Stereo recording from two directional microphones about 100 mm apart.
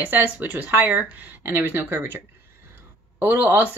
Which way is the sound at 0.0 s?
15° right (ahead or behind).